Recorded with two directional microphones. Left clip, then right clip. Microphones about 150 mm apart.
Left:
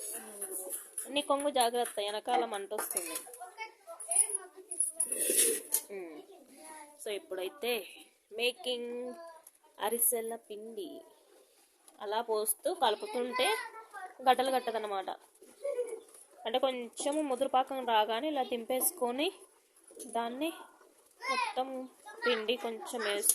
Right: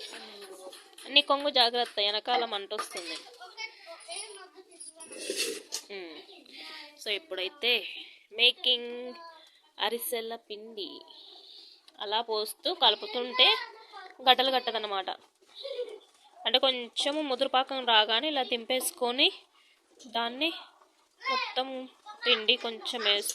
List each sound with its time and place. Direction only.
1.1 s a child's voice: centre (ahead or behind)
5.9 s bird: 10° left (ahead or behind)
7.0 s a woman's voice: 5° left (ahead or behind)
11.9 s a child's voice: 5° left (ahead or behind)
15.6 s a sound: 50° left (ahead or behind)
16.4 s a child's voice: 5° left (ahead or behind)